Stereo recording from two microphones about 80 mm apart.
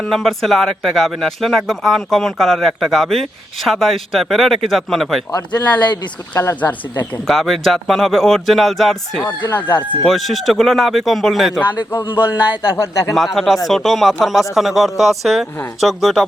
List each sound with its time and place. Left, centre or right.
0.0 s speech: centre
5.3 s speech: left
6.6 s speech: centre
7.3 s speech: centre
9.5 s speech: left
10.0 s speech: centre
12.6 s speech: left
13.1 s speech: centre